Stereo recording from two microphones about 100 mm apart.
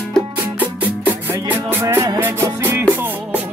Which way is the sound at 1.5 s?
25° right (ahead or behind).